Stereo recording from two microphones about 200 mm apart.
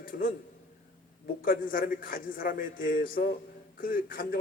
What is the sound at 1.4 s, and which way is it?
A man's voice, 45° left (ahead or behind).